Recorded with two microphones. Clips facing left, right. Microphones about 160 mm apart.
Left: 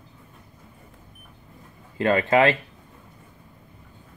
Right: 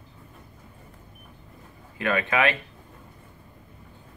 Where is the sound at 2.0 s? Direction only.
35° left (ahead or behind).